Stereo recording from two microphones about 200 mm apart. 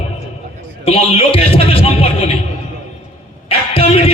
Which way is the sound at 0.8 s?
30° left (ahead or behind).